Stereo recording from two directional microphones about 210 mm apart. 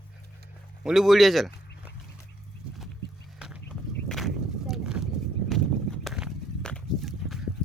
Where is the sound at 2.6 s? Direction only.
5° right (ahead or behind).